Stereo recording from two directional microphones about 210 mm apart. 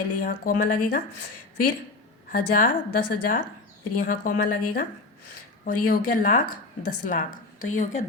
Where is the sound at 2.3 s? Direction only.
40° left (ahead or behind).